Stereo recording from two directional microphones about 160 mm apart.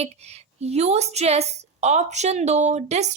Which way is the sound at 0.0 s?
40° right (ahead or behind).